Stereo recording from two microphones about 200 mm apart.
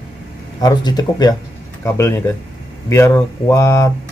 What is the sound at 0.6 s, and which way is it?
Speech, 20° left (ahead or behind).